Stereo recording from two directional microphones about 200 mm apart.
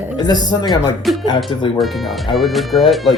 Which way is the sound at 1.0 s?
Centre (ahead or behind).